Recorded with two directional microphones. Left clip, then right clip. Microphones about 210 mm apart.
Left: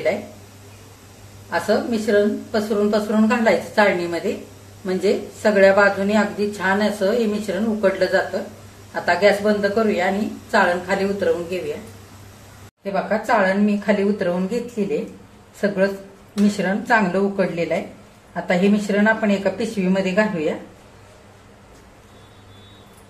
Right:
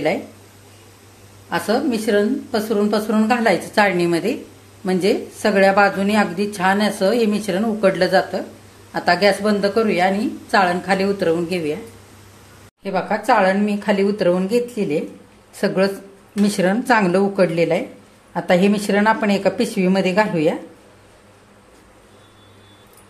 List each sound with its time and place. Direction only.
1.5 s speech: 45° right (ahead or behind)
12.8 s speech: 45° right (ahead or behind)